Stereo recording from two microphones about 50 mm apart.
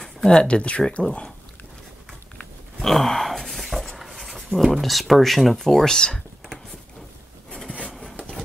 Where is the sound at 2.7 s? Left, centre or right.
Centre.